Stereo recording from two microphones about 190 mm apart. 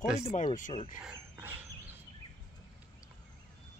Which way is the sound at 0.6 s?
45° left (ahead or behind).